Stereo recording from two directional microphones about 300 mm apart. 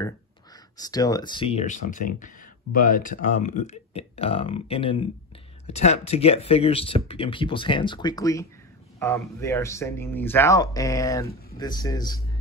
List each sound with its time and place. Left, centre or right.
0.7 s speech: centre